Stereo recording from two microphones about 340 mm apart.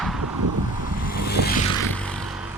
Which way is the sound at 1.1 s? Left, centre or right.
Left.